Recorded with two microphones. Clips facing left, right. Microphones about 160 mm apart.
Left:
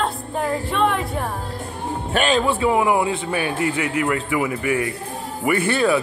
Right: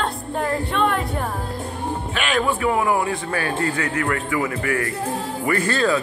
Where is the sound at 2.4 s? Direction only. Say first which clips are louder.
Left 2 dB; 20° left (ahead or behind).